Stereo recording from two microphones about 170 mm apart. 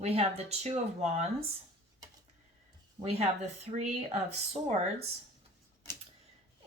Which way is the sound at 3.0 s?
25° right (ahead or behind).